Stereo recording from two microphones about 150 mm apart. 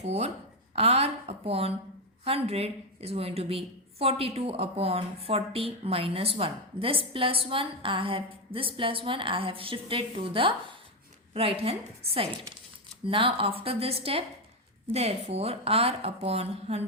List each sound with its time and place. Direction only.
0.0 s a woman's voice: 45° right (ahead or behind)